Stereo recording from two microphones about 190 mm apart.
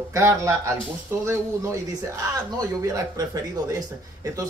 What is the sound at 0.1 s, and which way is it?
Speech, 15° right (ahead or behind).